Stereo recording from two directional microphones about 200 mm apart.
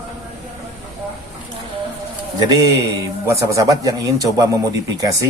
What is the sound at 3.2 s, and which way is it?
A man's voice, 15° right (ahead or behind).